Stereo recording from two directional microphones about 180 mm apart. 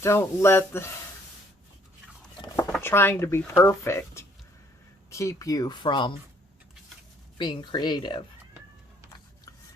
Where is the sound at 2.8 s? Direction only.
15° left (ahead or behind).